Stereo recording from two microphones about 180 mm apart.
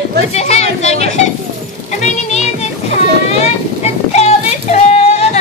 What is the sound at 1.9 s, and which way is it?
Music, 40° left (ahead or behind).